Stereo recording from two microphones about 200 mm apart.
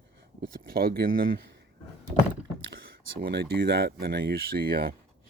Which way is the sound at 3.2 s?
55° right (ahead or behind).